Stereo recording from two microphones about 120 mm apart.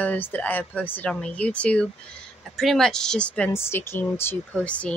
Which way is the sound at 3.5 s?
20° left (ahead or behind).